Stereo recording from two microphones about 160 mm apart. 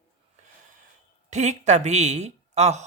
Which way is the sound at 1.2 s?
45° right (ahead or behind).